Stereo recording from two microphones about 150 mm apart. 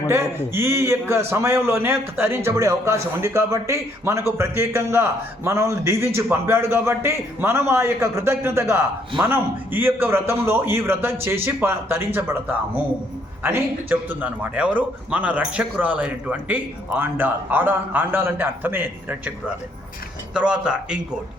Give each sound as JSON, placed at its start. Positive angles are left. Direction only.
{"t": 0.1, "sound": "a man's voice", "side_deg": -15}
{"t": 20.3, "sound": "a man's voice", "side_deg": -5}